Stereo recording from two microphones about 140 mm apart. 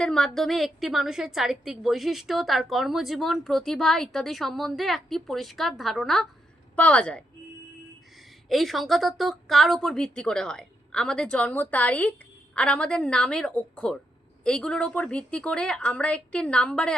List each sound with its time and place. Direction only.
0.0 s a woman's voice: 5° left (ahead or behind)
8.4 s a woman's voice: centre (ahead or behind)